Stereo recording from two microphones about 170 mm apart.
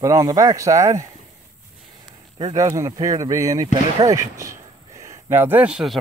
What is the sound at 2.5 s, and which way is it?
Speech, 20° right (ahead or behind).